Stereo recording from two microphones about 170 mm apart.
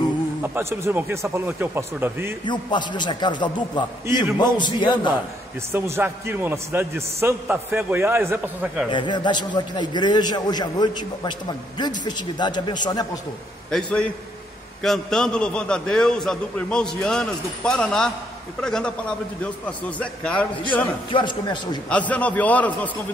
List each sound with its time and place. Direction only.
0.4 s a man's voice: 15° right (ahead or behind)
2.4 s a man's voice: 25° left (ahead or behind)
5.7 s a man's voice: 15° right (ahead or behind)
8.9 s a man's voice: 25° left (ahead or behind)
13.7 s a man's voice: 5° left (ahead or behind)
21.1 s a man's voice: 25° left (ahead or behind)
21.8 s a man's voice: 10° left (ahead or behind)